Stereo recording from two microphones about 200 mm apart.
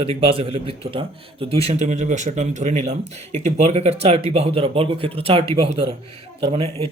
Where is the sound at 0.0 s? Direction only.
25° right (ahead or behind).